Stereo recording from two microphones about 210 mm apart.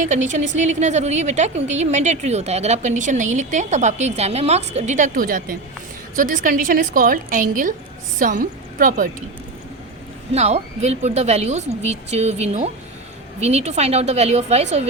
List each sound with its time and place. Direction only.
0.0 s a woman's voice: 35° right (ahead or behind)
10.3 s a woman's voice: 30° right (ahead or behind)